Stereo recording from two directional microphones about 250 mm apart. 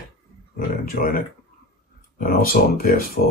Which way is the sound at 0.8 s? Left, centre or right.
Left.